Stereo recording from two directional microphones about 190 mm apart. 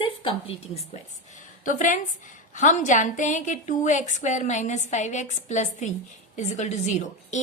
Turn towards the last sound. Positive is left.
turn(degrees=40)  # may be behind; listen again after turning